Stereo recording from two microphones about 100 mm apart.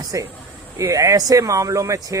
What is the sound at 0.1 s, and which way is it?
Speech, 30° right (ahead or behind).